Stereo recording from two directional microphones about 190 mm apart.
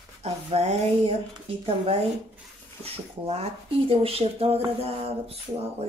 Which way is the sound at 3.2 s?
30° right (ahead or behind).